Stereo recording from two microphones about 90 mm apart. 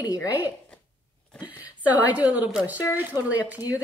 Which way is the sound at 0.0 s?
40° left (ahead or behind).